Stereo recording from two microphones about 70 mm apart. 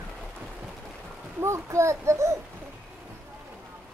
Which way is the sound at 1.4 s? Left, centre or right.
Right.